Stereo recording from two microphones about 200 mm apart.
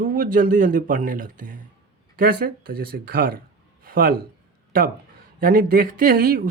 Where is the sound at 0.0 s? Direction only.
40° right (ahead or behind).